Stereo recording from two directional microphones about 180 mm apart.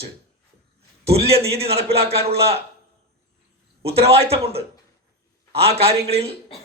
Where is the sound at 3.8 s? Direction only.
35° right (ahead or behind).